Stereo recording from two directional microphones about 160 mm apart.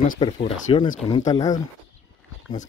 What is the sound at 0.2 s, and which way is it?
Speech, 35° left (ahead or behind).